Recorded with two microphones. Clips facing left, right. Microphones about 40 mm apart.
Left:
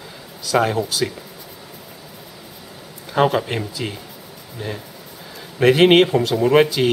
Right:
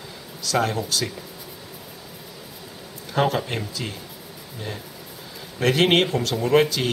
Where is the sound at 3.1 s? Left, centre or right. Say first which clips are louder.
Left 5 dB; centre.